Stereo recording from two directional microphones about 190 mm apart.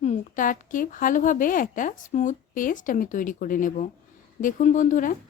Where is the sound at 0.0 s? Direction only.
40° left (ahead or behind).